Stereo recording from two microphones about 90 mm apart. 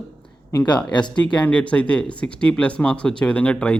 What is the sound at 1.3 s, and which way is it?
Speech, 15° left (ahead or behind).